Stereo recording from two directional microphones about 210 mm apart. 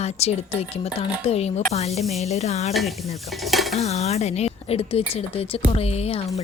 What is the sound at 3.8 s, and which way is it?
Speech, 30° left (ahead or behind).